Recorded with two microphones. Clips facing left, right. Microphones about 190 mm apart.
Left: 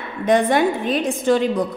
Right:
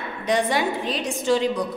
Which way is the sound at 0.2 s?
55° left (ahead or behind).